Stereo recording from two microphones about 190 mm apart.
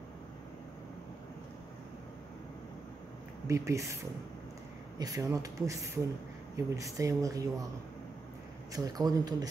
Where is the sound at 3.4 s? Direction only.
15° right (ahead or behind).